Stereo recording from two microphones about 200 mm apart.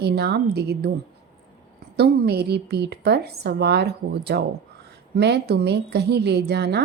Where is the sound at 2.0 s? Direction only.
55° right (ahead or behind).